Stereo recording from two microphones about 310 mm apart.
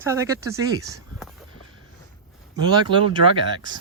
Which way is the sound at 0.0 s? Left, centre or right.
Centre.